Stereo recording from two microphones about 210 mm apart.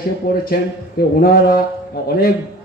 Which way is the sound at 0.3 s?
45° left (ahead or behind).